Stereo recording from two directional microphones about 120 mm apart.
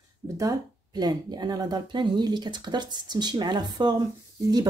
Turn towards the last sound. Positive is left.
turn(degrees=-35)  # may be behind; listen again after turning